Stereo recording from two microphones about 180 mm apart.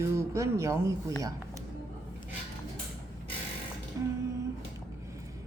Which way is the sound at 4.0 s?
15° right (ahead or behind).